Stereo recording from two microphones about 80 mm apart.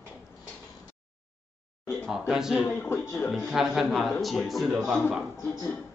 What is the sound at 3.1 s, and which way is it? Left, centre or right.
Speech, centre.